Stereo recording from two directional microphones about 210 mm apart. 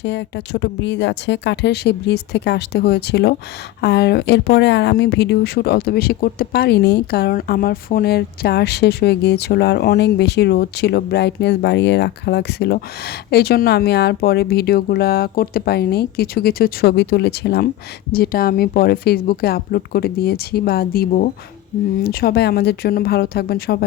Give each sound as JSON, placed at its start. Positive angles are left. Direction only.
{"t": 0.0, "sound": "speech", "side_deg": 55}